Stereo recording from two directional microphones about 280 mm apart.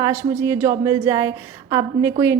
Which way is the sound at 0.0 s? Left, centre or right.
Centre.